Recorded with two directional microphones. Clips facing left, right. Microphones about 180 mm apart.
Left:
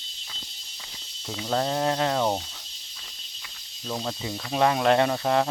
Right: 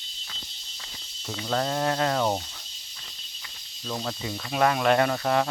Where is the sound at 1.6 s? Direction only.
20° left (ahead or behind).